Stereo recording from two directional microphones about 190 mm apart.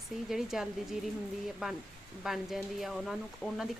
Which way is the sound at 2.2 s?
Centre (ahead or behind).